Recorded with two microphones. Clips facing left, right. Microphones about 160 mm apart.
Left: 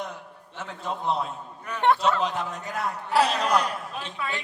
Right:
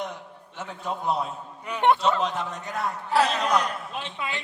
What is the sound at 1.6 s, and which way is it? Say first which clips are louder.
Speech: right 1 dB; 15° right (ahead or behind).